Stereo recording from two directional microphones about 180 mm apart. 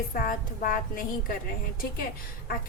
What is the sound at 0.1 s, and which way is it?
A woman's voice, 50° left (ahead or behind).